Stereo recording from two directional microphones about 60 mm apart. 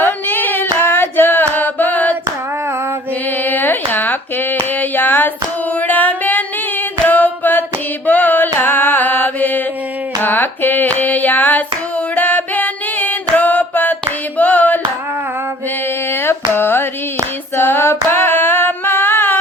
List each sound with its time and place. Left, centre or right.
0.0 s singing: left
3.4 s a sound: left
5.9 s singing: left
7.1 s a sound: left
8.0 s mantra: left
10.2 s hands: left
12.1 s music: left
14.3 s hands: left
16.2 s carnatic music: left
17.6 s female singing: left